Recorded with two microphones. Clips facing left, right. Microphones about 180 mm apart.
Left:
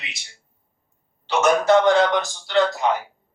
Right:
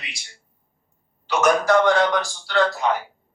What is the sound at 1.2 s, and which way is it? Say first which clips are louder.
Speech: left 1 dB; 25° left (ahead or behind).